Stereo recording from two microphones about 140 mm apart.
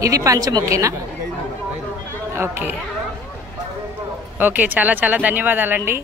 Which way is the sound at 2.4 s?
15° right (ahead or behind).